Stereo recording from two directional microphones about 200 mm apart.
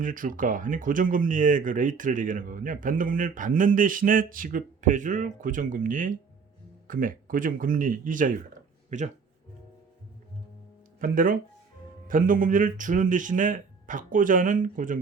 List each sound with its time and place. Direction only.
0.0 s speech: 40° right (ahead or behind)
11.0 s speech: 45° right (ahead or behind)